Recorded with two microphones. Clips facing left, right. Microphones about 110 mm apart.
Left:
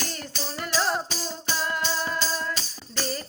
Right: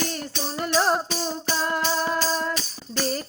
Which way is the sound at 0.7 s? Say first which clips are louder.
Right 4 dB; 45° right (ahead or behind).